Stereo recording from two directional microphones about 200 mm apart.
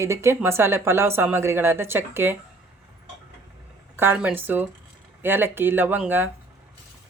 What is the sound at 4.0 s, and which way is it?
Speech, 10° right (ahead or behind).